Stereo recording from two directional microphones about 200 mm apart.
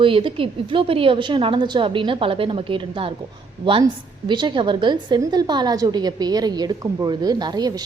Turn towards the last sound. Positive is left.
turn(degrees=-20)  # may be behind; listen again after turning